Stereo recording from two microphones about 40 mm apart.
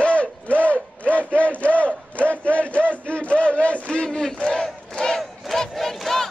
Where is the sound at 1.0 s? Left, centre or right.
Left.